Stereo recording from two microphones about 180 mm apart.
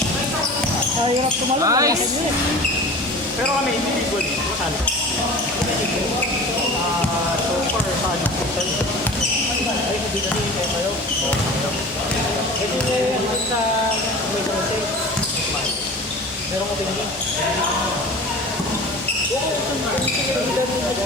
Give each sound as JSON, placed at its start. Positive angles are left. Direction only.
{"t": 1.6, "sound": "speech", "side_deg": -20}